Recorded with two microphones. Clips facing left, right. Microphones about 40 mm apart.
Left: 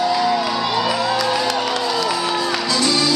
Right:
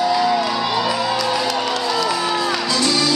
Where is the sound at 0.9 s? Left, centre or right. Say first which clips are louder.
Left 1 dB; centre.